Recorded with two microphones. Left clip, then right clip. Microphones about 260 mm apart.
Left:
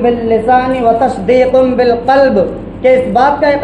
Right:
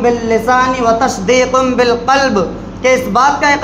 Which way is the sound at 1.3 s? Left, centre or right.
Right.